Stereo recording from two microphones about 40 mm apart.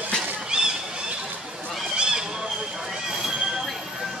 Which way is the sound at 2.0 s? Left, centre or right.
Centre.